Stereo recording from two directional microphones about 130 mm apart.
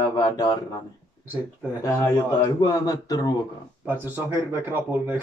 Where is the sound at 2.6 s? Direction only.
30° left (ahead or behind).